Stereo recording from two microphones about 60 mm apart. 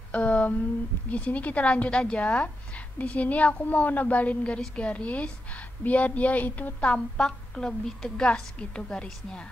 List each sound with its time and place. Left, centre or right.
0.1 s a sound: left
1.1 s a woman's voice: left
6.8 s a woman's voice: centre